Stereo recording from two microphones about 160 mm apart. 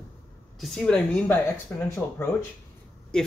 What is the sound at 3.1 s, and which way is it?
Speech, 5° left (ahead or behind).